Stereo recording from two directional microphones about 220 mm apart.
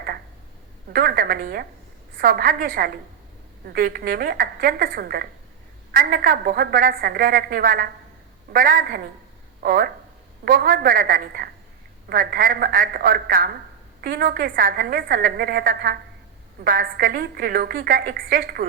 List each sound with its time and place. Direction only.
0.9 s a woman's voice: 40° right (ahead or behind)